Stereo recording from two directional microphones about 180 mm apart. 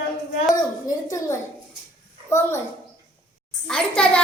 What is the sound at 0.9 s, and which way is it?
Speech, 15° left (ahead or behind).